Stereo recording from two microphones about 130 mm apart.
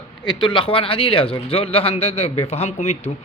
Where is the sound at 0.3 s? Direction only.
40° left (ahead or behind).